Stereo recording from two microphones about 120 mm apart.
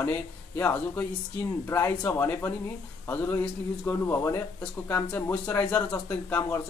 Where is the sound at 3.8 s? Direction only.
20° left (ahead or behind).